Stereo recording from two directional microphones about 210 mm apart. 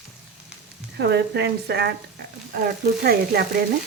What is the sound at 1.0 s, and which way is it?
Frying, 55° right (ahead or behind).